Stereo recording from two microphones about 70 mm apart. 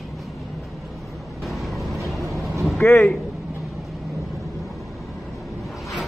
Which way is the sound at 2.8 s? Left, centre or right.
Left.